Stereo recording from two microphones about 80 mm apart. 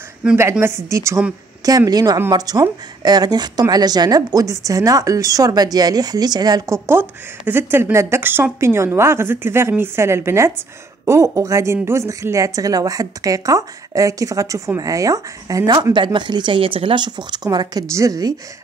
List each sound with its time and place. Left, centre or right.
0.4 s a woman's voice: right
1.6 s speech: right
6.6 s a woman's voice: right
7.0 s a woman's voice: right
15.7 s speech: right
17.8 s a woman's voice: right